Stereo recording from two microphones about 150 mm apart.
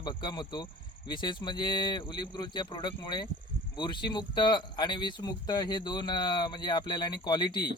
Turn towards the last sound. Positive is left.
turn(degrees=30)  # may be behind; listen again after turning